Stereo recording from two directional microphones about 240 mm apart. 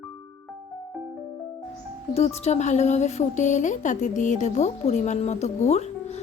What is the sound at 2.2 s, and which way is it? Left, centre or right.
A woman's voice, left.